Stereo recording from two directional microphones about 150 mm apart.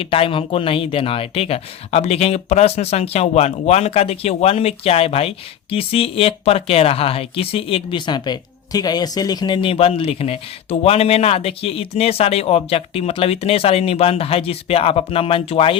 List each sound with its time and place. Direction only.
0.0 s speech: 35° left (ahead or behind)